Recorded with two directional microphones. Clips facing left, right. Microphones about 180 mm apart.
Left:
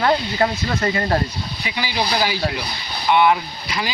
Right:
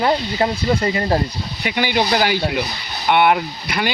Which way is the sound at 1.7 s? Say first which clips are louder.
Right 5 dB; 55° right (ahead or behind).